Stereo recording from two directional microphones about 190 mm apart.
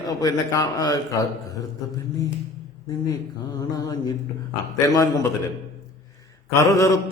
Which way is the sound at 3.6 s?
20° left (ahead or behind).